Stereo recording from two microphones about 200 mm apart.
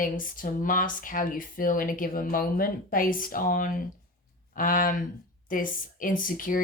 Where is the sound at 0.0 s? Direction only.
45° left (ahead or behind).